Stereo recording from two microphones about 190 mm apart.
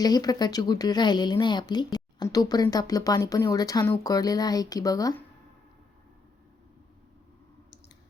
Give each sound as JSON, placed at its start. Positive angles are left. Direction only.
{"t": 0.0, "sound": "speech", "side_deg": 20}